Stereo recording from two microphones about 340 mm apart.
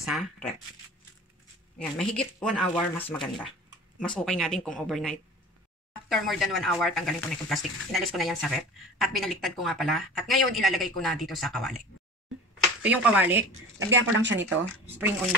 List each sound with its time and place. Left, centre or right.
0.0 s speech: centre
1.8 s speech: centre
12.8 s speech: centre
13.7 s speech: right
15.0 s speech: centre